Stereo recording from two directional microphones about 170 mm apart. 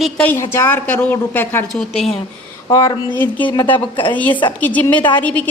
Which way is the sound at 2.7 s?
20° left (ahead or behind).